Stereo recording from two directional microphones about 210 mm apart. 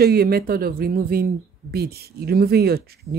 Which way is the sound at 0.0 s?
50° right (ahead or behind).